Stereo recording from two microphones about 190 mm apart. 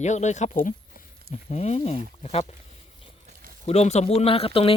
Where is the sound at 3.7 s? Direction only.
35° left (ahead or behind).